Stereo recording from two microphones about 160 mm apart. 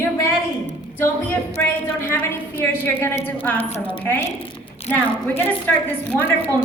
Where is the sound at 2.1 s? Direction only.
10° left (ahead or behind).